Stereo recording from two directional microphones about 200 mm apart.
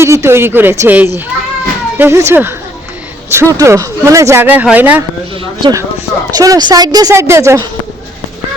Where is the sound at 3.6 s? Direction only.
15° right (ahead or behind).